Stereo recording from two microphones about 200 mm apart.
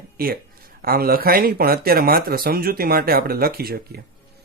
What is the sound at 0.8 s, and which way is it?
Speech, 50° right (ahead or behind).